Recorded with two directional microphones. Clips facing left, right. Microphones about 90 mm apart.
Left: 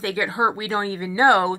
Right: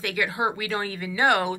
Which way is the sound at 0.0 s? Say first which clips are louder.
Left 4 dB; 30° left (ahead or behind).